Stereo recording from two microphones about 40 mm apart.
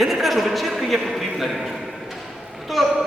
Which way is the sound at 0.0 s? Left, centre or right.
Centre.